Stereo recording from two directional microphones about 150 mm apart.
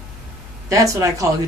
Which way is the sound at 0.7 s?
20° right (ahead or behind).